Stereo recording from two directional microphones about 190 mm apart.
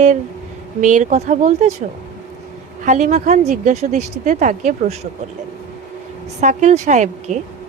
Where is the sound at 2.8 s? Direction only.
40° right (ahead or behind).